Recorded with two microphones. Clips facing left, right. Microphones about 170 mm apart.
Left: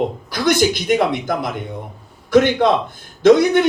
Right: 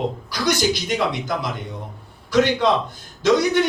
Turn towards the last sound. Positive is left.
turn(degrees=55)  # may be behind; listen again after turning